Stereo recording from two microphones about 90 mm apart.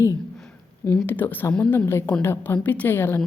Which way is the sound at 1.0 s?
20° left (ahead or behind).